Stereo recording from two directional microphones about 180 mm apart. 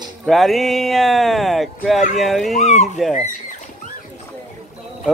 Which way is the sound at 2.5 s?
40° left (ahead or behind).